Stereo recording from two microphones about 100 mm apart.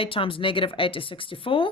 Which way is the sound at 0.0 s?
60° left (ahead or behind).